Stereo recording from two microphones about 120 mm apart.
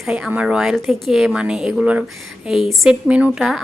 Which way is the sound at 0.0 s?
5° right (ahead or behind).